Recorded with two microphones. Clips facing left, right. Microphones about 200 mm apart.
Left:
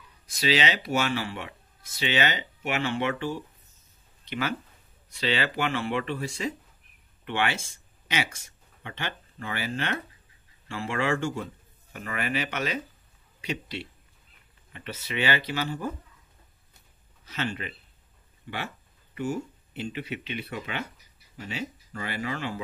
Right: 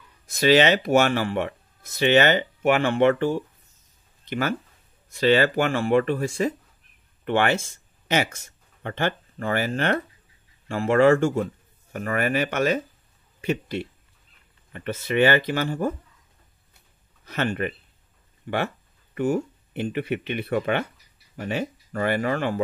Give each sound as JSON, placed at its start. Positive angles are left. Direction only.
{"t": 0.3, "sound": "speech", "side_deg": -50}
{"t": 17.2, "sound": "speech", "side_deg": -55}